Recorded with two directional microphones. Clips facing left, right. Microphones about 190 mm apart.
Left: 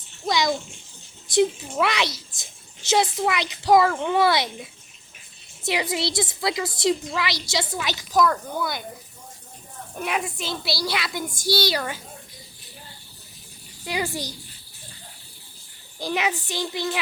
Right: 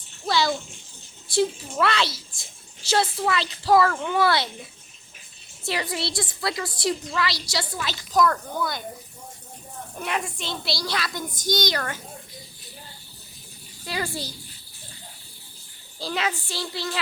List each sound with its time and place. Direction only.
0.3 s bathtub: 15° left (ahead or behind)
1.3 s a child's voice: 20° left (ahead or behind)
5.6 s a woman's voice: 20° left (ahead or behind)
8.1 s a woman's voice: 5° left (ahead or behind)
10.0 s a woman's voice: 5° left (ahead or behind)
13.8 s a child's voice: 15° left (ahead or behind)
16.0 s a child's voice: 15° left (ahead or behind)